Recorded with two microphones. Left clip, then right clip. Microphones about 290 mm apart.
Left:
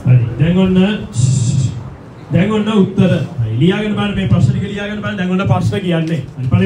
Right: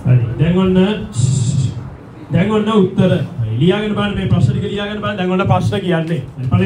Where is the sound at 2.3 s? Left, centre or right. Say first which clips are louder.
Even; centre.